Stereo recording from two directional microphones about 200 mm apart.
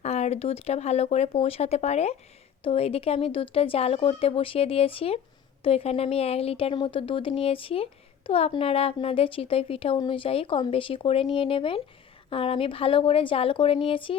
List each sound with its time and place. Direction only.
0.0 s a woman's voice: 35° left (ahead or behind)